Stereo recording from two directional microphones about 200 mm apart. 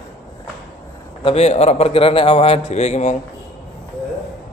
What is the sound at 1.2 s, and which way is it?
A man's voice, 30° left (ahead or behind).